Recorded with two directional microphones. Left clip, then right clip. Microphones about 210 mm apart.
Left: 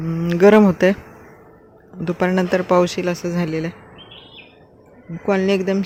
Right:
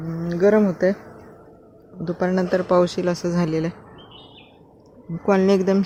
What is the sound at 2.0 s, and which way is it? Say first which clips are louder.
Speech: left 3 dB; 10° left (ahead or behind).